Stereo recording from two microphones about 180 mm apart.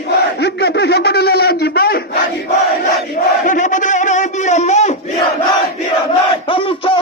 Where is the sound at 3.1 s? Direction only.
45° left (ahead or behind).